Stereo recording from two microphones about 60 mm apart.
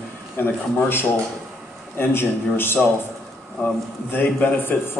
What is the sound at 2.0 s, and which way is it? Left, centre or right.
Speech, left.